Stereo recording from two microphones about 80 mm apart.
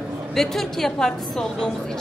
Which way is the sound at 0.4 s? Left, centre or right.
Centre.